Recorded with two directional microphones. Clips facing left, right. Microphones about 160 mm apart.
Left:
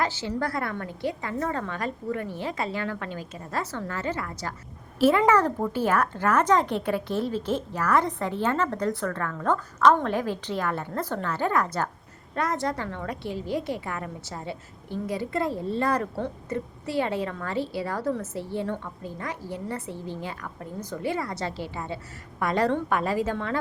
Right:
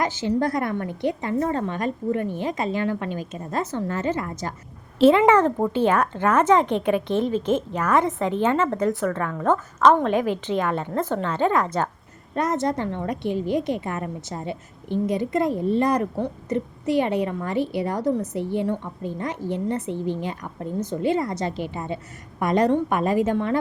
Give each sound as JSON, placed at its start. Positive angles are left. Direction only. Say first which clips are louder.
{"t": 0.0, "sound": "a woman's voice", "louder": "right 5 dB", "side_deg": -20}